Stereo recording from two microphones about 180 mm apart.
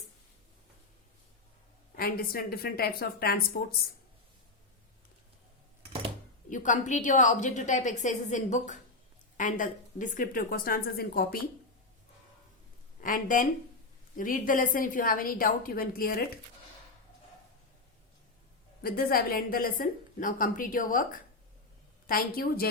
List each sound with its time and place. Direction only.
2.0 s a woman's voice: 55° left (ahead or behind)
6.5 s a woman's voice: 45° left (ahead or behind)
13.0 s a woman's voice: 50° left (ahead or behind)
18.8 s a woman's voice: 55° left (ahead or behind)